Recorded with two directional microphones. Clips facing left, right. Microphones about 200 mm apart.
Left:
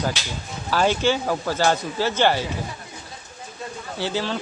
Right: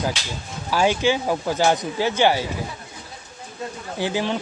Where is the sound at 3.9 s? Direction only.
15° right (ahead or behind).